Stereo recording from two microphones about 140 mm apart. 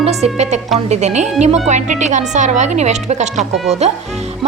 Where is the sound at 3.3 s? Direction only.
Centre (ahead or behind).